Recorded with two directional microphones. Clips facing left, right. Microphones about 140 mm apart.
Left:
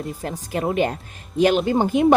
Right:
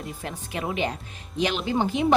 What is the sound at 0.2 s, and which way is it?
A woman's voice, 45° left (ahead or behind).